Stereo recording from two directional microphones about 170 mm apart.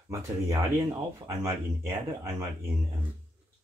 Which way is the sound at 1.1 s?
15° right (ahead or behind).